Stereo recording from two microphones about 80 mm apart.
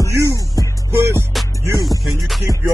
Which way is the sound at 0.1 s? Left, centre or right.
Right.